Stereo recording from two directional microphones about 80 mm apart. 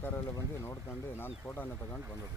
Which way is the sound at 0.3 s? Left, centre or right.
Left.